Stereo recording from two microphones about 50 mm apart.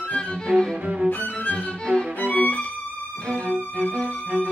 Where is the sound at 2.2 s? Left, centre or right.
Left.